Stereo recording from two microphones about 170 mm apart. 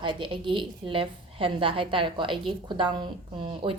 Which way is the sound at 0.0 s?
30° right (ahead or behind).